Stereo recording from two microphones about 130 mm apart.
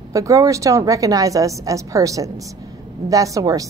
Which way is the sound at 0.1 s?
25° right (ahead or behind).